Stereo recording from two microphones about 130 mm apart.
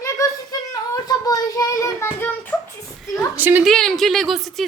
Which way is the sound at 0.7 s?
30° left (ahead or behind).